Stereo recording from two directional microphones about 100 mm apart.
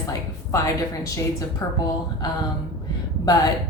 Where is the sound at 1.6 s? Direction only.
40° left (ahead or behind).